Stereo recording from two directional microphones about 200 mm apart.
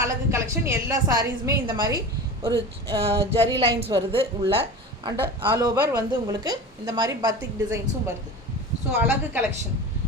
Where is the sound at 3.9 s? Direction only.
20° right (ahead or behind).